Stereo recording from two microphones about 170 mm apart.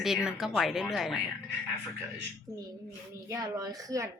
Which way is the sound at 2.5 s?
15° right (ahead or behind).